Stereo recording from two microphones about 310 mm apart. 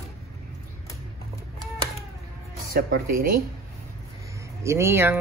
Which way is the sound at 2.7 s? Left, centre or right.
Right.